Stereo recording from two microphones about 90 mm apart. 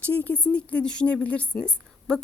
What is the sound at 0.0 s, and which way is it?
Speech, 15° left (ahead or behind).